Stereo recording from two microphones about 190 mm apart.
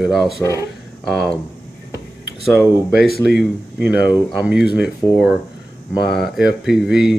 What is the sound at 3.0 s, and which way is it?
Speech, 55° left (ahead or behind).